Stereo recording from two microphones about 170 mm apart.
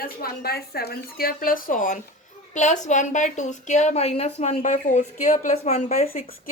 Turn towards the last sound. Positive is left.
turn(degrees=40)  # may be behind; listen again after turning